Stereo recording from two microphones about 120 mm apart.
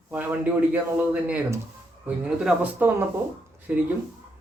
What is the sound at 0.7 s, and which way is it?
Speech, 10° right (ahead or behind).